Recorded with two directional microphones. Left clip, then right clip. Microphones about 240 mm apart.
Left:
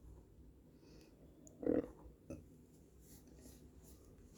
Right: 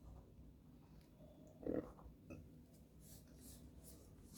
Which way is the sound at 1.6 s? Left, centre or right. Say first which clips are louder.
Left 8 dB; left.